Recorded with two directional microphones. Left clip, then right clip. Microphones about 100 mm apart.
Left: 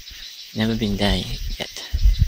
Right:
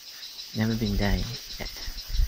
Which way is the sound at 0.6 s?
20° left (ahead or behind).